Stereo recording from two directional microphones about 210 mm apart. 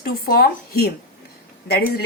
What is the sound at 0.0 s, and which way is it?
Speech, 45° left (ahead or behind).